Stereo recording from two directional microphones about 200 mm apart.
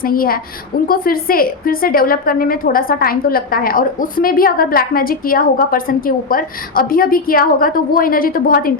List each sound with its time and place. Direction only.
0.0 s a woman's voice: 45° left (ahead or behind)